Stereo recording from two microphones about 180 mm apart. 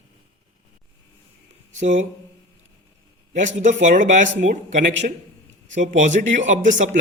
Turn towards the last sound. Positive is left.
turn(degrees=-45)  # may be behind; listen again after turning